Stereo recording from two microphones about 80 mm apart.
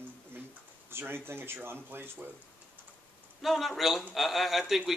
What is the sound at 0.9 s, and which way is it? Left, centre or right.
Speech, right.